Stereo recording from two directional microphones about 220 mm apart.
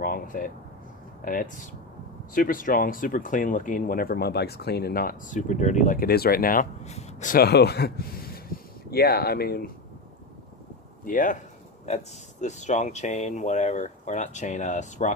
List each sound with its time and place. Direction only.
0.0 s speech: 40° left (ahead or behind)
11.1 s speech: 35° left (ahead or behind)